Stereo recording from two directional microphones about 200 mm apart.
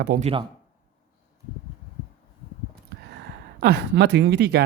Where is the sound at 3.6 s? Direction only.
55° right (ahead or behind).